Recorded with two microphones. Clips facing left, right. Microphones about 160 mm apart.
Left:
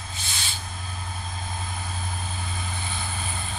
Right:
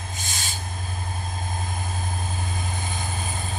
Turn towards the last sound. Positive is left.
turn(degrees=-40)  # may be behind; listen again after turning